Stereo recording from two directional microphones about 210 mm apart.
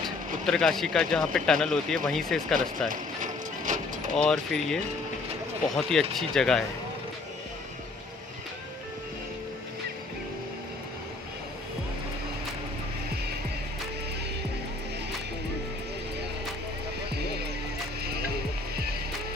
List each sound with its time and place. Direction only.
0.4 s speech: centre (ahead or behind)
2.9 s mechanisms: 35° right (ahead or behind)
4.3 s speech: 5° left (ahead or behind)